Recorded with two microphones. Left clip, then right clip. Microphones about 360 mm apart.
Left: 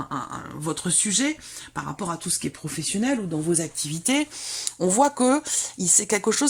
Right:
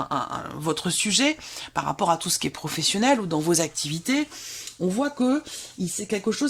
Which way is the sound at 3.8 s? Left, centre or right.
Centre.